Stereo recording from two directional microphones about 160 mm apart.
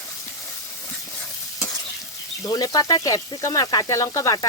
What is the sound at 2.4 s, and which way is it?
Speech, 25° left (ahead or behind).